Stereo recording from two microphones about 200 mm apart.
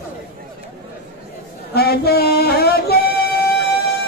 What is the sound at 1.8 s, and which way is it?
Music, 50° left (ahead or behind).